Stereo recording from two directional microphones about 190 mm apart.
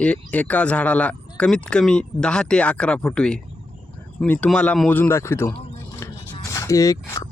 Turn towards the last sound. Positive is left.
turn(degrees=20)  # may be behind; listen again after turning